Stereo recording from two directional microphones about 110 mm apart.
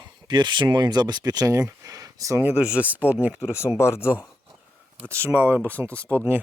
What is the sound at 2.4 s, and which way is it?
Speech, 15° right (ahead or behind).